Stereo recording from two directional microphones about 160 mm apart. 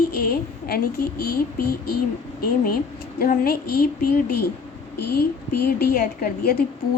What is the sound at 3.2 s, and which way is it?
A woman's voice, 65° left (ahead or behind).